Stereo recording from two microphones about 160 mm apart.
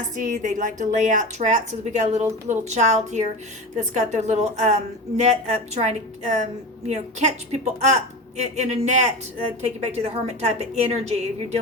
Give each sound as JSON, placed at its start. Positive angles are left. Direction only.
{"t": 0.2, "sound": "a woman's voice", "side_deg": -50}